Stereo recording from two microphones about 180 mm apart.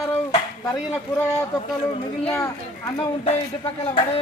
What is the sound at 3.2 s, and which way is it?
Speech, 30° left (ahead or behind).